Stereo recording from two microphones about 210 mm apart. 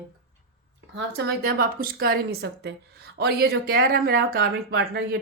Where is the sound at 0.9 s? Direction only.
50° right (ahead or behind).